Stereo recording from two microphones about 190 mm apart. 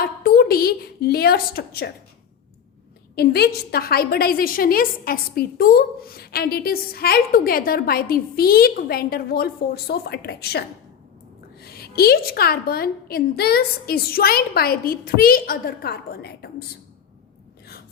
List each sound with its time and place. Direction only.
0.0 s a woman's voice: 50° left (ahead or behind)
3.2 s a woman's voice: 55° left (ahead or behind)
11.6 s a woman's voice: 55° left (ahead or behind)